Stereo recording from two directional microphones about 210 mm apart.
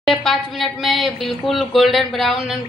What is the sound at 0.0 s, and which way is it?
Speech, centre (ahead or behind).